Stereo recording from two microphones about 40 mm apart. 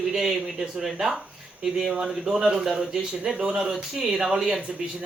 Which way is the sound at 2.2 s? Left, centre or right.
Centre.